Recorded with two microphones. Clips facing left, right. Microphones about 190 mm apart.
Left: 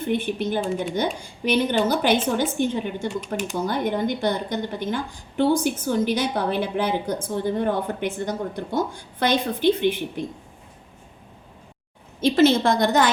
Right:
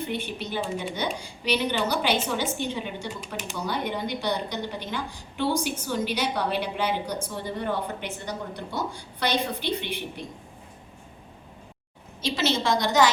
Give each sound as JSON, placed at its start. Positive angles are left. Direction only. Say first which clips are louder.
{"t": 0.0, "sound": "a woman's voice", "louder": "left 7 dB", "side_deg": 50}
{"t": 12.2, "sound": "a woman's voice", "louder": "left 9 dB", "side_deg": 55}